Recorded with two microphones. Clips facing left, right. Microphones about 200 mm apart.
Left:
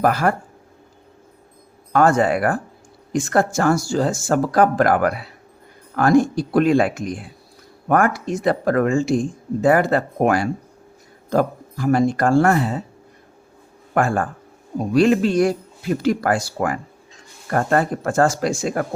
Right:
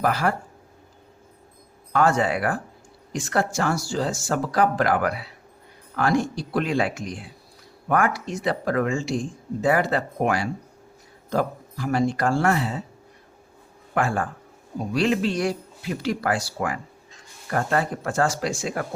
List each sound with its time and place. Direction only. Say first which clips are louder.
0.0 s speech: left 5 dB; 50° left (ahead or behind)
1.9 s speech: left 5 dB; 50° left (ahead or behind)
13.9 s speech: left 5 dB; 50° left (ahead or behind)